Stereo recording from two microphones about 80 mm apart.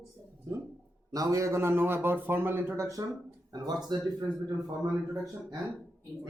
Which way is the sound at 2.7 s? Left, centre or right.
Right.